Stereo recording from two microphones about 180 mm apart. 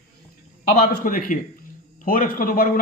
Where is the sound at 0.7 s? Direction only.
55° left (ahead or behind).